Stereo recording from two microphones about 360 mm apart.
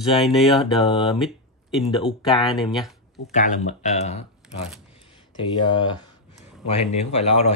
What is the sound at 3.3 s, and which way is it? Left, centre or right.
Speech, centre.